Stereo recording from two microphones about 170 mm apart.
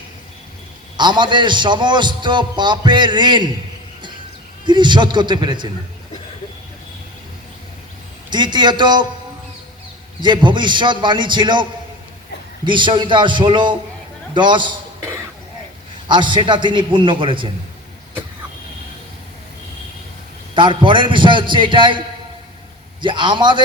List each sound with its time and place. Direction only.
0.9 s a man's voice: 25° right (ahead or behind)
4.6 s a man's voice: 25° right (ahead or behind)
8.3 s a man's voice: 25° right (ahead or behind)
10.2 s a man's voice: 25° right (ahead or behind)
12.6 s a man's voice: 30° right (ahead or behind)
20.6 s a man's voice: 30° right (ahead or behind)